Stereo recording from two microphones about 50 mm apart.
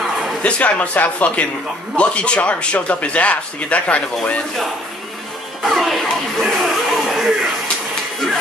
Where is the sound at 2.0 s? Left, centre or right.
Left.